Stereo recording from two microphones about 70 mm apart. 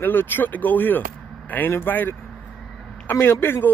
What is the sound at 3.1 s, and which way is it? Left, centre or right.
Speech, left.